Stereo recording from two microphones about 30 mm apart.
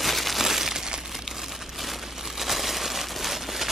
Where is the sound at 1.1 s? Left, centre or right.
Centre.